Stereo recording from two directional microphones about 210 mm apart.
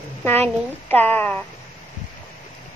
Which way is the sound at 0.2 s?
10° left (ahead or behind).